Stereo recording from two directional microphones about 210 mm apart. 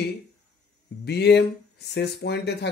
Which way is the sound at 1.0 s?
50° left (ahead or behind).